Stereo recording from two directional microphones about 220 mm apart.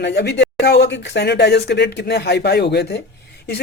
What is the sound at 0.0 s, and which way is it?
Speech, 50° left (ahead or behind).